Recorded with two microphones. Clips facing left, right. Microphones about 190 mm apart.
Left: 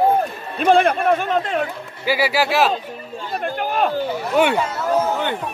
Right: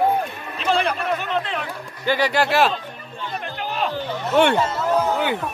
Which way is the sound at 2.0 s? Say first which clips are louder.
Left 1 dB; 5° left (ahead or behind).